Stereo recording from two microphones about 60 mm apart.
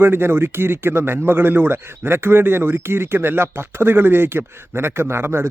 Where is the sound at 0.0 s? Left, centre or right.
Right.